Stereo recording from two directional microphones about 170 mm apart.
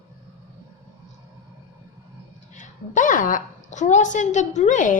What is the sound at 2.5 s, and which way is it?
Speech, 50° left (ahead or behind).